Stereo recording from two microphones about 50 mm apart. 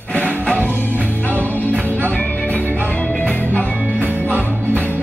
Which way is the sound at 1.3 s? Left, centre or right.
Right.